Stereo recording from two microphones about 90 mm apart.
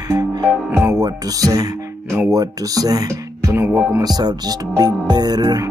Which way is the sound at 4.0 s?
50° right (ahead or behind).